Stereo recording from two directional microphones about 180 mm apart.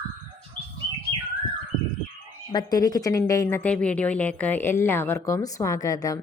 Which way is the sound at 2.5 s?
25° left (ahead or behind).